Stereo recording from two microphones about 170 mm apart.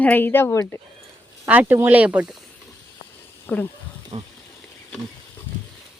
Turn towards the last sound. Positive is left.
turn(degrees=-35)  # may be behind; listen again after turning